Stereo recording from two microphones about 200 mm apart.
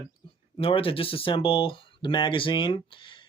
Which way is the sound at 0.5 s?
25° left (ahead or behind).